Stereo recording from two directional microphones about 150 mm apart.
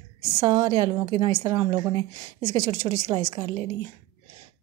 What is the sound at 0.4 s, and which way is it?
A woman's voice, 30° right (ahead or behind).